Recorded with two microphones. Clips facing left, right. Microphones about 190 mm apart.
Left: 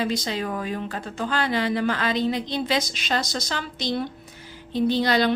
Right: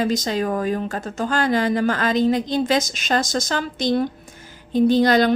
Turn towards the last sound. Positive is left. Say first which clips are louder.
# right 5 dB
turn(degrees=-45)  # may be behind; listen again after turning